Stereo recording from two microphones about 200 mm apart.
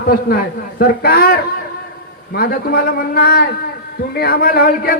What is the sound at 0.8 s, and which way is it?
A man's voice, 50° left (ahead or behind).